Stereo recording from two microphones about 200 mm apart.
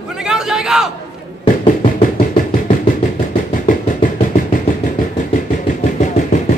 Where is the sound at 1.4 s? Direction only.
30° left (ahead or behind).